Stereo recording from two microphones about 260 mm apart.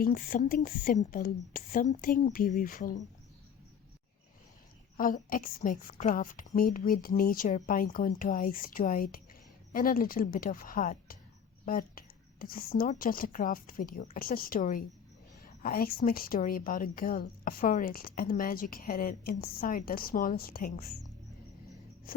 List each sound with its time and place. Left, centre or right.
0.0 s speech: left
4.9 s speech: left